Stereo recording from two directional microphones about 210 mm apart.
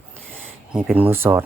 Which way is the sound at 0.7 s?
5° right (ahead or behind).